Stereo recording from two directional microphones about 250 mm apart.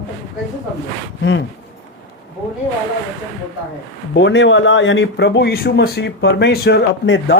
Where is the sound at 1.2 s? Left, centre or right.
Left.